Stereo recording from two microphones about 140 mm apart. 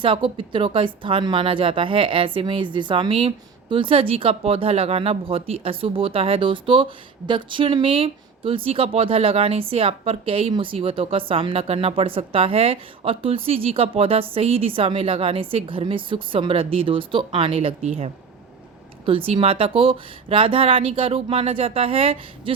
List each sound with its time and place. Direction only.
0.0 s speech: 40° right (ahead or behind)